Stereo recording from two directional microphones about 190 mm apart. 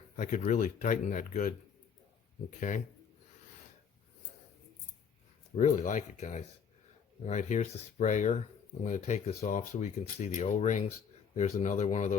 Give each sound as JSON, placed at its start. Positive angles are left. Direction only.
{"t": 0.2, "sound": "speech", "side_deg": 40}
{"t": 2.6, "sound": "speech", "side_deg": 40}
{"t": 5.5, "sound": "speech", "side_deg": 40}